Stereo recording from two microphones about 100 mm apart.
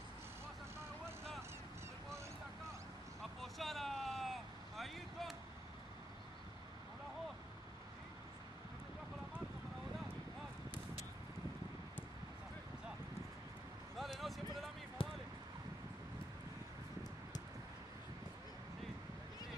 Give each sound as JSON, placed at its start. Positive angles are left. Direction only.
{"t": 3.5, "sound": "vehicle", "side_deg": 0}
{"t": 13.9, "sound": "a sound", "side_deg": 0}
{"t": 15.0, "sound": "basketball bounce", "side_deg": 60}